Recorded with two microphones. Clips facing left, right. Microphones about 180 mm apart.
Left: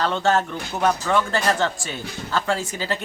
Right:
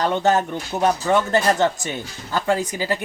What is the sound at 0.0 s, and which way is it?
Speech, 15° right (ahead or behind).